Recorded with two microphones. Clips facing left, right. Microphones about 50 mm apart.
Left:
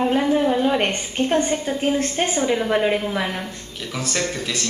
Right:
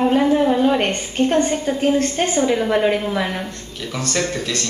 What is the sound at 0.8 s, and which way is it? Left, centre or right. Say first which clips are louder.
A woman's voice: right 3 dB; centre.